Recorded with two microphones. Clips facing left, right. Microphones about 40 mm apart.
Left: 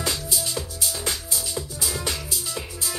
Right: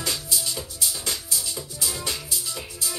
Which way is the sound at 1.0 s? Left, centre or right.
Left.